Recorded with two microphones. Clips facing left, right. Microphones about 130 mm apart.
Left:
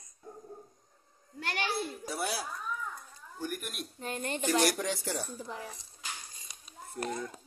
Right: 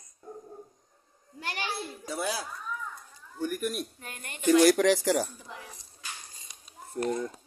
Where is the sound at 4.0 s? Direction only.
30° left (ahead or behind).